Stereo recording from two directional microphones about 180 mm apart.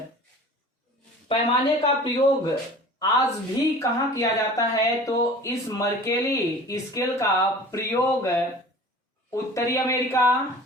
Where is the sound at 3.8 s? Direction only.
15° left (ahead or behind).